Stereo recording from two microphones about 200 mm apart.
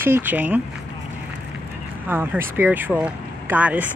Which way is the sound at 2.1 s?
10° right (ahead or behind).